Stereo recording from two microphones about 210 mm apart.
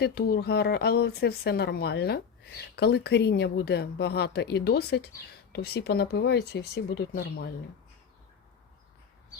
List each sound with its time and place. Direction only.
0.0 s speech: 50° left (ahead or behind)